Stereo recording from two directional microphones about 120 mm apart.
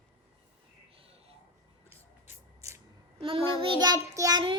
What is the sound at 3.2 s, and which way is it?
Child singing, 45° right (ahead or behind).